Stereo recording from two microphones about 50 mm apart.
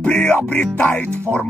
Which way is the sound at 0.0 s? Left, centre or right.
Left.